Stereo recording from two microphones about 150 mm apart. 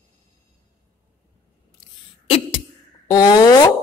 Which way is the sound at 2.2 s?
40° left (ahead or behind).